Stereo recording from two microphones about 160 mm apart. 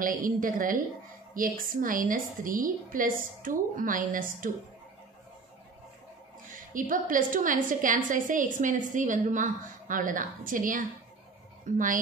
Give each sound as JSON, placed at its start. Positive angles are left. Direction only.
{"t": 0.0, "sound": "a woman's voice", "side_deg": -60}
{"t": 6.4, "sound": "a woman's voice", "side_deg": -60}